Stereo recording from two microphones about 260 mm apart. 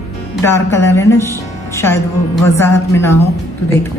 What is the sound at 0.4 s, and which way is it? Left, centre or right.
A woman's voice, centre.